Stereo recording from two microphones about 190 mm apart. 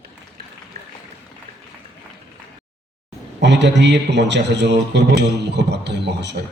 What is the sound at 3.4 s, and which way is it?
A man's voice, 65° right (ahead or behind).